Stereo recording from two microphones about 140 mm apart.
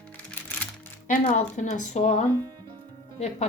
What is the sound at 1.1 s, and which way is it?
A woman's voice, 60° left (ahead or behind).